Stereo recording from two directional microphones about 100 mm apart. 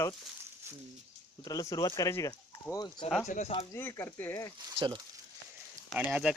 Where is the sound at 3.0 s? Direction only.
90° left.